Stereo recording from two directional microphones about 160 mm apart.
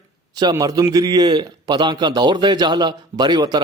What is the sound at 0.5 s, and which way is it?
A man's voice, 20° right (ahead or behind).